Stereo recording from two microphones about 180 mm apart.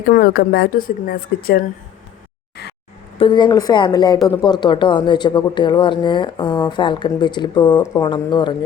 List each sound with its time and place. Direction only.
0.1 s speech: 60° left (ahead or behind)
3.2 s speech: 25° left (ahead or behind)